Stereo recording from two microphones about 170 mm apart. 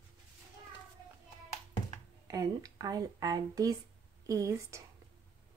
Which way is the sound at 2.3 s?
20° right (ahead or behind).